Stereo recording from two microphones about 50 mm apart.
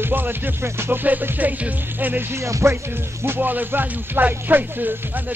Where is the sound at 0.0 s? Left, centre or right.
Right.